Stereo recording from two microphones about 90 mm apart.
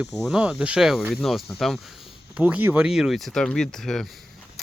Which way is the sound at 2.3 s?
15° right (ahead or behind).